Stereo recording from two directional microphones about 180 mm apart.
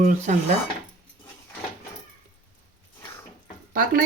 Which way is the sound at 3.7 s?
55° right (ahead or behind).